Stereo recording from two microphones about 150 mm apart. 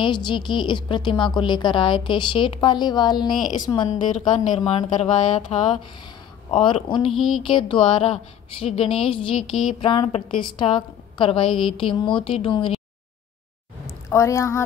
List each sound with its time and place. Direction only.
0.0 s a woman's voice: 30° left (ahead or behind)
4.6 s a woman's voice: 45° left (ahead or behind)
7.1 s speech: centre (ahead or behind)
7.4 s a woman's voice: 35° left (ahead or behind)
9.5 s a sound: 45° left (ahead or behind)
9.8 s a woman's voice: 35° left (ahead or behind)
14.0 s a woman's voice: 20° left (ahead or behind)